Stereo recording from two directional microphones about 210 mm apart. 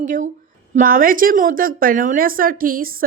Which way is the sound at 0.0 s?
35° right (ahead or behind).